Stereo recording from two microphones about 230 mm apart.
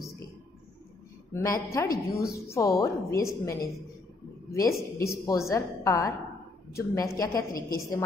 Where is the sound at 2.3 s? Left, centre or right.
Centre.